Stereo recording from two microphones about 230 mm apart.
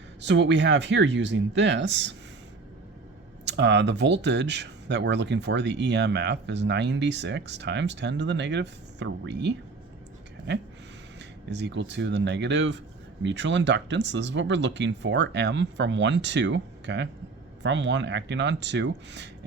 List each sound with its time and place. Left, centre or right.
0.2 s speech: right
3.4 s speech: right